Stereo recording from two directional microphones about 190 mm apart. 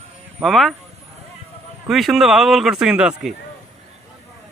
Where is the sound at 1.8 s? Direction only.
Centre (ahead or behind).